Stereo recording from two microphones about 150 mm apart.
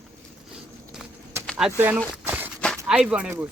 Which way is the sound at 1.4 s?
5° right (ahead or behind).